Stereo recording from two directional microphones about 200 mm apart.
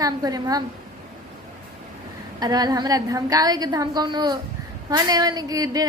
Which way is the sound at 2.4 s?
20° right (ahead or behind).